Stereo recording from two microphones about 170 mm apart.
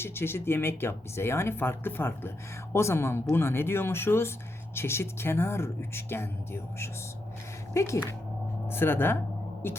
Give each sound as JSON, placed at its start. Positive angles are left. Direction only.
{"t": 0.0, "sound": "speech", "side_deg": 15}